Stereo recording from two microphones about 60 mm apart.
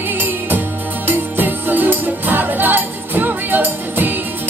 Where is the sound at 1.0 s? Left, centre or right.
Right.